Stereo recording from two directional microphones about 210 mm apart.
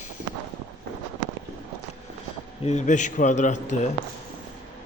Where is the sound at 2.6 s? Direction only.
35° left (ahead or behind).